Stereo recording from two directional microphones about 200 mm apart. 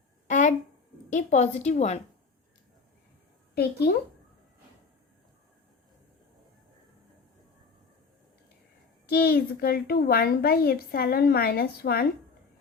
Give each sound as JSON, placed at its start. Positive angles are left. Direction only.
{"t": 0.3, "sound": "a sound", "side_deg": 40}
{"t": 1.1, "sound": "a woman's voice", "side_deg": 35}
{"t": 3.5, "sound": "a woman's voice", "side_deg": 55}
{"t": 9.0, "sound": "a woman's voice", "side_deg": 50}